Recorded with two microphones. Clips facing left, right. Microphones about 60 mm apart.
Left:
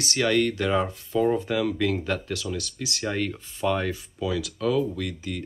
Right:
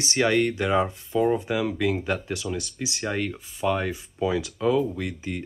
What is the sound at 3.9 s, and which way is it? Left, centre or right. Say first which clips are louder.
Speech: right 3 dB; right.